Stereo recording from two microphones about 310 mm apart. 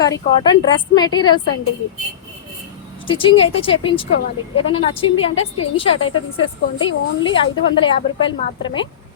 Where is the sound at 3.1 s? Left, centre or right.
Centre.